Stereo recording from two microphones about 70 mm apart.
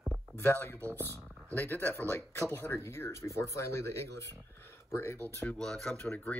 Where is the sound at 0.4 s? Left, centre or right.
Left.